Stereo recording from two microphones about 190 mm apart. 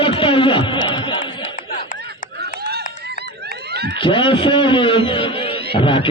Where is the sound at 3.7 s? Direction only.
55° right (ahead or behind).